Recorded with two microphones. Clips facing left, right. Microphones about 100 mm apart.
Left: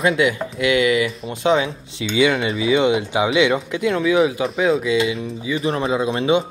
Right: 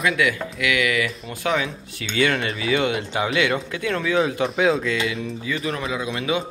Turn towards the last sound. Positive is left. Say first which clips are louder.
# left 7 dB
turn(degrees=30)  # may be behind; listen again after turning